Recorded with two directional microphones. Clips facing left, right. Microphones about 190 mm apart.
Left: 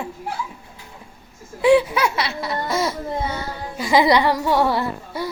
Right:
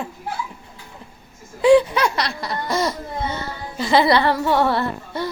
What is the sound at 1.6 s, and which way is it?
Speech, 5° left (ahead or behind).